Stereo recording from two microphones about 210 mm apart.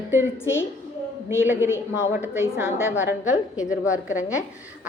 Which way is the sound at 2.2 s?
5° right (ahead or behind).